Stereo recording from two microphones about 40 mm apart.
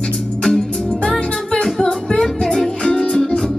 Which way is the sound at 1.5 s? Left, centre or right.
Centre.